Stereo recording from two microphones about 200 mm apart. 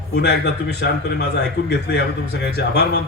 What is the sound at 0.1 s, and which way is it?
A man's voice, 55° left (ahead or behind).